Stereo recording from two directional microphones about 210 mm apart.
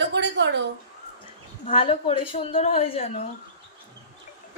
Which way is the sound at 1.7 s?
25° left (ahead or behind).